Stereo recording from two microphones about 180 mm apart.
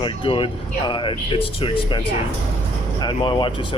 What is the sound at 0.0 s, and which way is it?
Speech, 30° left (ahead or behind).